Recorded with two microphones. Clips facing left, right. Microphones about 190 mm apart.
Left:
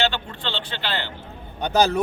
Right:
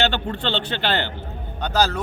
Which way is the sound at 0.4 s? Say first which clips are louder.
Right 6 dB; 60° right (ahead or behind).